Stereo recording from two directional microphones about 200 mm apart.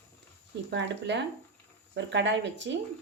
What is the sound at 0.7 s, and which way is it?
Speech, 60° right (ahead or behind).